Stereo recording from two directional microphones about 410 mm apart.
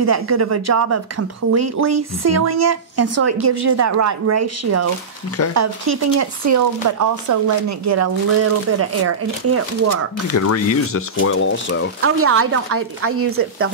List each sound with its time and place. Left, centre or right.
0.0 s speech: right
10.3 s speech: left
12.0 s speech: right